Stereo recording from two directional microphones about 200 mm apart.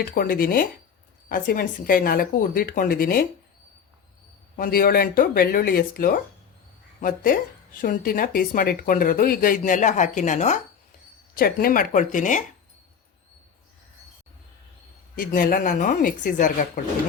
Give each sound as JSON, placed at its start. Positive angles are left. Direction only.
{"t": 0.0, "sound": "speech", "side_deg": 45}
{"t": 4.5, "sound": "speech", "side_deg": 45}
{"t": 7.8, "sound": "speech", "side_deg": 45}
{"t": 11.3, "sound": "speech", "side_deg": 45}
{"t": 15.1, "sound": "speech", "side_deg": 45}